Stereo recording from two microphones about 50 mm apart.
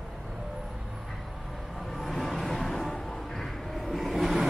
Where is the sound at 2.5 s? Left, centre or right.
Centre.